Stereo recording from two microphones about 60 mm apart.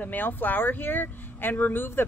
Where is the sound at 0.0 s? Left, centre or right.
Left.